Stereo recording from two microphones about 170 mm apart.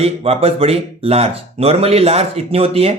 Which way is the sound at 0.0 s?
35° right (ahead or behind).